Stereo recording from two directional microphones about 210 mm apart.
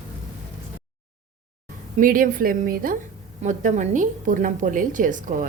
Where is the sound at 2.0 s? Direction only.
40° right (ahead or behind).